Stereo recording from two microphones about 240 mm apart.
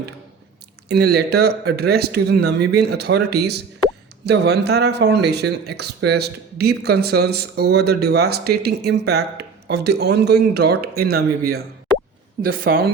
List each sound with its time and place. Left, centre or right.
0.9 s speech: right